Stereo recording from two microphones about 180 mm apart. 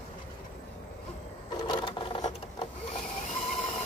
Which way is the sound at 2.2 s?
40° left (ahead or behind).